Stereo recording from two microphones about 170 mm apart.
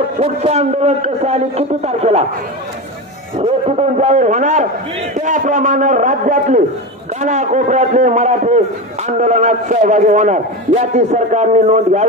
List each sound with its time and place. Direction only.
0.2 s a man's voice: 40° right (ahead or behind)
3.3 s a man's voice: 40° right (ahead or behind)